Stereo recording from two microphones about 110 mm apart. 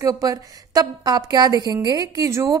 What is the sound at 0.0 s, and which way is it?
A woman's voice, 30° right (ahead or behind).